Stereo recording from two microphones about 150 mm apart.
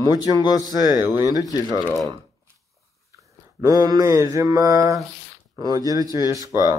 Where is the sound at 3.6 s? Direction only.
25° right (ahead or behind).